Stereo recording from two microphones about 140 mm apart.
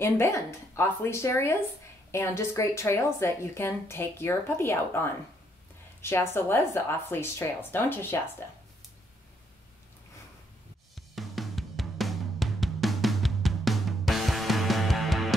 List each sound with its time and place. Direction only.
0.0 s speech: 20° left (ahead or behind)
11.1 s music: centre (ahead or behind)